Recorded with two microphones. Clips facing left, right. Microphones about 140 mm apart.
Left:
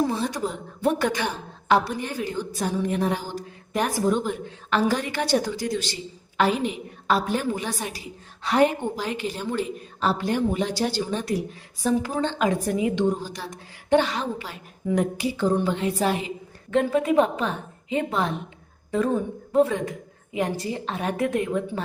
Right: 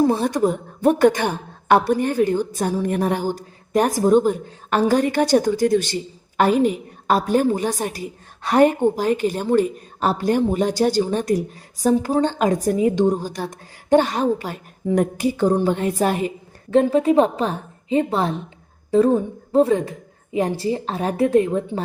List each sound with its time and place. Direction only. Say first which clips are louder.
0.1 s a woman's voice: right 8 dB; 55° right (ahead or behind)
16.7 s a woman's voice: right 5 dB; 30° right (ahead or behind)